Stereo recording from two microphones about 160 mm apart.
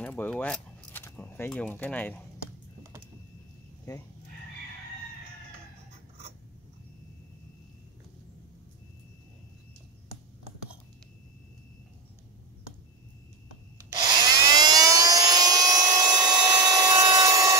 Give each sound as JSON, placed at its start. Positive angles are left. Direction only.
{"t": 0.0, "sound": "speech", "side_deg": 10}
{"t": 3.9, "sound": "speech", "side_deg": 20}
{"t": 13.7, "sound": "helicopter", "side_deg": -20}